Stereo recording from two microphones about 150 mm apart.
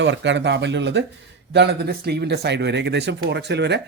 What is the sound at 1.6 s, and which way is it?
Speech, 90° right.